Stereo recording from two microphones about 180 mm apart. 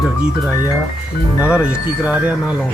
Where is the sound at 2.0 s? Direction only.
10° right (ahead or behind).